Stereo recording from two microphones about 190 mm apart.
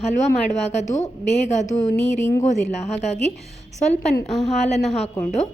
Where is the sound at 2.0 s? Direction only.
15° left (ahead or behind).